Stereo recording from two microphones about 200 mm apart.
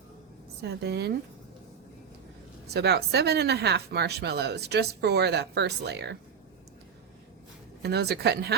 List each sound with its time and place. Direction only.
0.6 s speech: 55° right (ahead or behind)
2.6 s speech: 55° right (ahead or behind)
7.8 s speech: 55° right (ahead or behind)